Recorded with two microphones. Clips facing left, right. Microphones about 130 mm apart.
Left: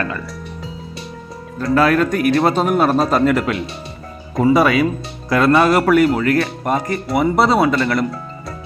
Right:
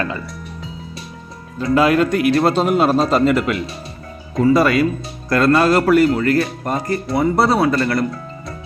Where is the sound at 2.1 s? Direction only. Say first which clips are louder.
Even; 5° right (ahead or behind).